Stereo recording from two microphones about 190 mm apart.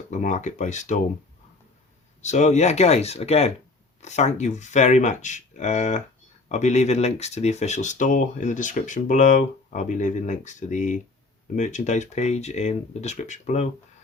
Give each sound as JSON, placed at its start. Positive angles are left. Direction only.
{"t": 0.1, "sound": "speech", "side_deg": 40}
{"t": 2.2, "sound": "speech", "side_deg": 40}